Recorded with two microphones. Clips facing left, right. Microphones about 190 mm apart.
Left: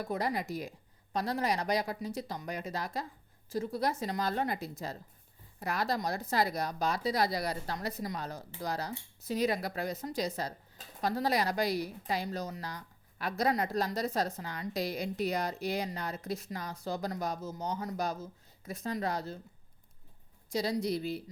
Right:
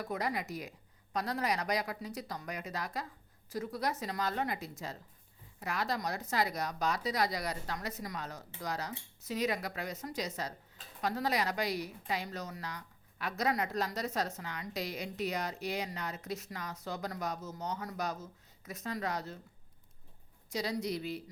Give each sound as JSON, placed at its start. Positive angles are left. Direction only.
{"t": 0.0, "sound": "a woman's voice", "side_deg": 30}
{"t": 20.5, "sound": "a woman's voice", "side_deg": 30}